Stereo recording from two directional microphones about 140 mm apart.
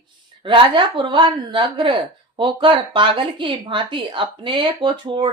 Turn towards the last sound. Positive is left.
turn(degrees=-35)  # may be behind; listen again after turning